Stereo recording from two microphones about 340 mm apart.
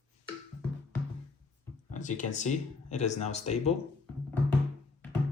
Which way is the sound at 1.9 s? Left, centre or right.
Left.